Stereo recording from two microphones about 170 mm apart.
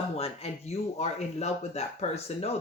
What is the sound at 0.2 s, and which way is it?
Speech, 35° left (ahead or behind).